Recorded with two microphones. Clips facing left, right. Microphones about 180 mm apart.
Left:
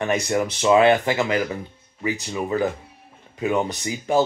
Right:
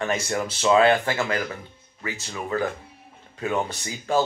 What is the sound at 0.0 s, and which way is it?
Speech, 15° left (ahead or behind).